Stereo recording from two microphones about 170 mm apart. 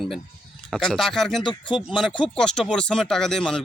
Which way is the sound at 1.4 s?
25° left (ahead or behind).